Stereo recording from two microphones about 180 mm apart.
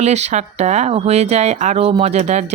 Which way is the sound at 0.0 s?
40° right (ahead or behind).